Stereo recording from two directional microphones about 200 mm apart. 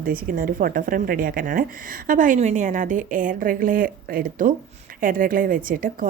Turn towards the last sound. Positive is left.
turn(degrees=-45)  # may be behind; listen again after turning